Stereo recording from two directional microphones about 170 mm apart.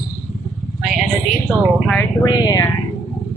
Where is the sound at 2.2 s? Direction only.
20° left (ahead or behind).